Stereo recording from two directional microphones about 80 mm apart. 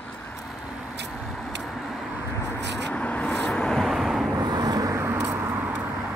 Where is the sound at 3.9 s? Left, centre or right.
Centre.